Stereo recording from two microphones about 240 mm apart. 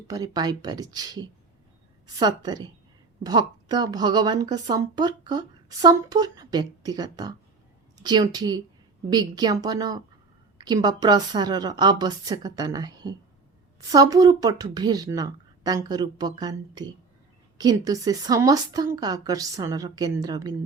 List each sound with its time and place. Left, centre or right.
0.1 s a woman's voice: centre